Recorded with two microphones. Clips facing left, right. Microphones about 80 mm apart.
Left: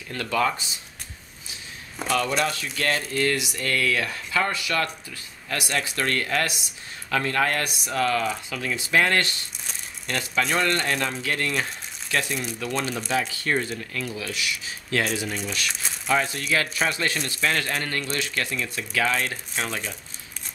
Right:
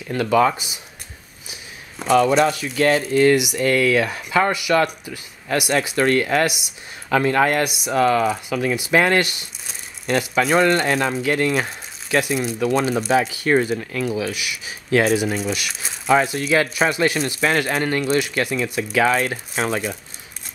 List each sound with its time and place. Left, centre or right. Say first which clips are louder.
0.1 s speech: right 7 dB; centre
2.2 s speech: right 8 dB; centre
19.3 s speech: right 6 dB; right